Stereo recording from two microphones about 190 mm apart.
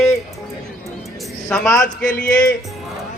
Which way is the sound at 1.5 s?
5° left (ahead or behind).